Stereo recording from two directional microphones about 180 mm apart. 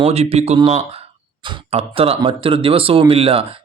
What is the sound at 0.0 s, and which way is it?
Speech, 35° right (ahead or behind).